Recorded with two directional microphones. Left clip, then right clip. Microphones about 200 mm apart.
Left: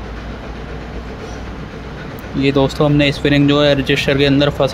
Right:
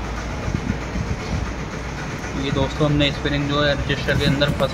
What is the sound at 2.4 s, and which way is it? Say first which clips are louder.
Speech: left 8 dB; 25° left (ahead or behind).